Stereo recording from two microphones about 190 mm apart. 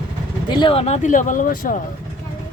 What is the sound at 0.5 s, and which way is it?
Speech, 25° left (ahead or behind).